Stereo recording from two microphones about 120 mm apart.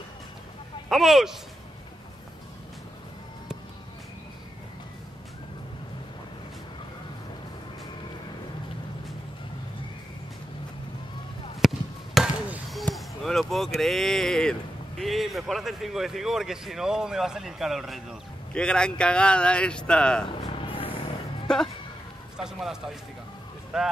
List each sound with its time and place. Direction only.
0.8 s speech: centre (ahead or behind)
11.6 s basketball bounce: centre (ahead or behind)
12.7 s speech: centre (ahead or behind)
20.2 s music: 45° left (ahead or behind)
21.5 s a man's voice: 5° left (ahead or behind)
22.4 s a man's voice: 5° right (ahead or behind)